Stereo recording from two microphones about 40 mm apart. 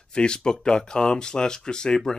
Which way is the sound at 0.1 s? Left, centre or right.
Left.